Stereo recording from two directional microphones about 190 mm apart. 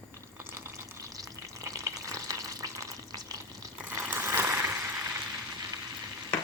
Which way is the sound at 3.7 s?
15° right (ahead or behind).